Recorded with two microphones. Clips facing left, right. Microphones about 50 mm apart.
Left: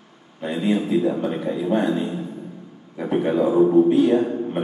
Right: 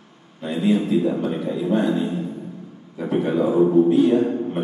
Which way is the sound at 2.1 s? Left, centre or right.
Centre.